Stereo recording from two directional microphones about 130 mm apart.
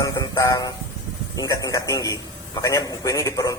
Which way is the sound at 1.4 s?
25° left (ahead or behind).